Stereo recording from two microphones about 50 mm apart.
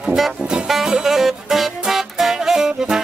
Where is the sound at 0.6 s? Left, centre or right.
Centre.